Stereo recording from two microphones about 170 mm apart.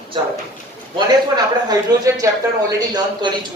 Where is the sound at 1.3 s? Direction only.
20° right (ahead or behind).